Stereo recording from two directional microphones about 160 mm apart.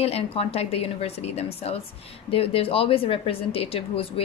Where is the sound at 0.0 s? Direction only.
40° left (ahead or behind).